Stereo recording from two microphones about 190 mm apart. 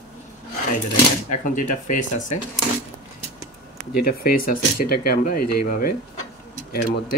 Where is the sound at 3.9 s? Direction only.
50° left (ahead or behind).